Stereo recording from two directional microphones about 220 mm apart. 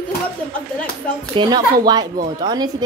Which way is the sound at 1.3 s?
20° right (ahead or behind).